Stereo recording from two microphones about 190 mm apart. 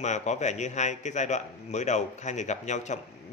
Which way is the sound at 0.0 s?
40° left (ahead or behind).